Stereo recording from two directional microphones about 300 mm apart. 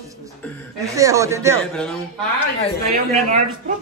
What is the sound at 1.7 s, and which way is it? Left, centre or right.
Speech, centre.